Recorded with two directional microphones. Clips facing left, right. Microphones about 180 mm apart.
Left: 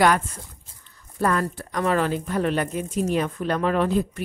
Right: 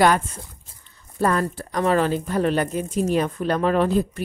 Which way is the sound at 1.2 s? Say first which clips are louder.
Right 2 dB; 30° right (ahead or behind).